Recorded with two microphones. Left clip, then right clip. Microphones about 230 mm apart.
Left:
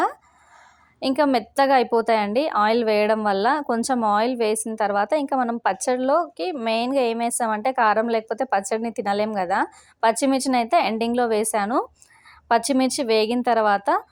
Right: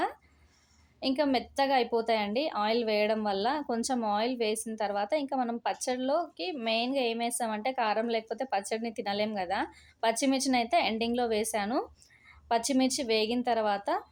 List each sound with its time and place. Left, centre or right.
0.9 s a woman's voice: left